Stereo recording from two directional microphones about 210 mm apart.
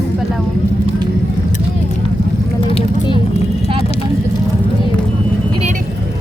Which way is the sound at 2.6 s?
25° left (ahead or behind).